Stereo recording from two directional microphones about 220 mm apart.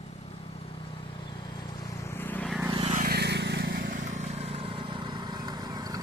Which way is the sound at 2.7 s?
30° right (ahead or behind).